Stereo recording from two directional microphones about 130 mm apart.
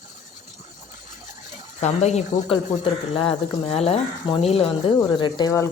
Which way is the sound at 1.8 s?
60° left (ahead or behind).